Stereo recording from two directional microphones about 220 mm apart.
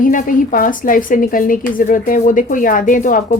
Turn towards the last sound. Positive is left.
turn(degrees=35)  # may be behind; listen again after turning